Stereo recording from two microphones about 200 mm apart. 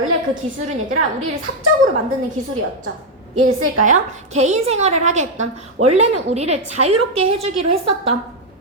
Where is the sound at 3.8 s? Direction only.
35° right (ahead or behind).